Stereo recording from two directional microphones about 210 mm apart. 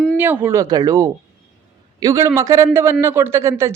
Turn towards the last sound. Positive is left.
turn(degrees=-15)  # may be behind; listen again after turning